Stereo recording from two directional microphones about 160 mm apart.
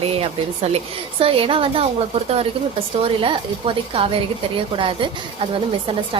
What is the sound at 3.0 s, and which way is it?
A woman's voice, 35° right (ahead or behind).